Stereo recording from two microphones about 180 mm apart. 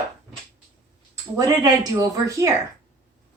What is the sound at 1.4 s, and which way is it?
A woman's voice, 20° right (ahead or behind).